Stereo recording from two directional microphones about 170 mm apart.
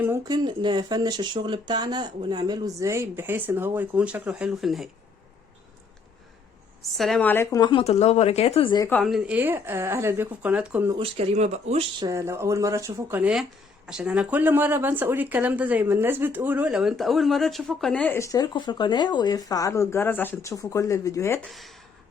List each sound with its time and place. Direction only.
0.3 s speech: 25° right (ahead or behind); by 4.9 s centre (ahead or behind)
6.9 s speech: centre (ahead or behind)
7.6 s a woman's voice: 30° left (ahead or behind)
8.9 s speech: 5° left (ahead or behind)
10.9 s speech: 35° right (ahead or behind)
11.9 s speech: 20° right (ahead or behind); by 21.5 s 15° left (ahead or behind)
21.5 s speech: centre (ahead or behind)